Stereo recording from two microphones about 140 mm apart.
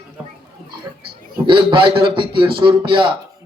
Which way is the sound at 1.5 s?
35° right (ahead or behind).